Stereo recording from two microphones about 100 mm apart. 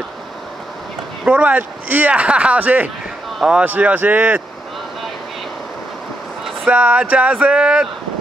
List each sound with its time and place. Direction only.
1.2 s speech: 15° right (ahead or behind)
6.6 s speech: 15° right (ahead or behind)